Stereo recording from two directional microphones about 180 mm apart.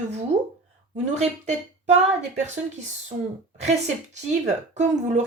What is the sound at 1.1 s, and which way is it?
A woman's voice, 35° right (ahead or behind).